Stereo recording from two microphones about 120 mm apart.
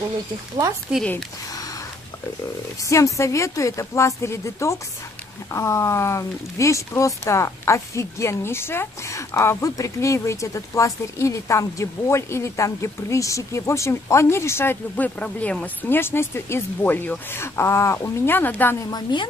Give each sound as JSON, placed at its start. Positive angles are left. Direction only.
{"t": 0.9, "sound": "speech", "side_deg": -5}
{"t": 2.9, "sound": "speech", "side_deg": 25}
{"t": 18.9, "sound": "a woman's voice", "side_deg": 35}